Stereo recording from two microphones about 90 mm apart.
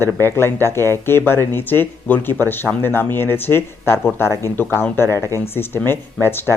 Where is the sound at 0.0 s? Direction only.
25° left (ahead or behind).